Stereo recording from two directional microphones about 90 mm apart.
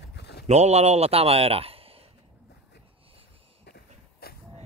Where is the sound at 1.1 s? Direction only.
90° right.